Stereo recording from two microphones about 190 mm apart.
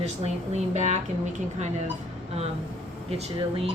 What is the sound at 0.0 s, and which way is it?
Speech, 35° right (ahead or behind).